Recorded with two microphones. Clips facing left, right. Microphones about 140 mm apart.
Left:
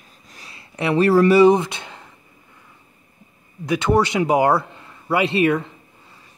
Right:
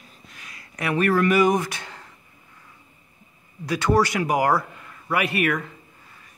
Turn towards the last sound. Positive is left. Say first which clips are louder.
# left 5 dB
turn(degrees=25)  # may be behind; listen again after turning